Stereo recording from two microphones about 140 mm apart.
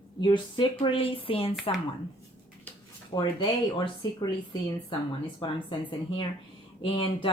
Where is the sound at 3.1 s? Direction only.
35° left (ahead or behind).